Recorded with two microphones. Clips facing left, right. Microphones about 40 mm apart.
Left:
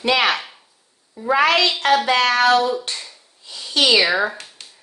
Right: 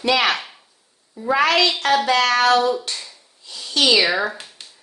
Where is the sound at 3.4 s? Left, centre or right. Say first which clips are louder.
Left 1 dB; left.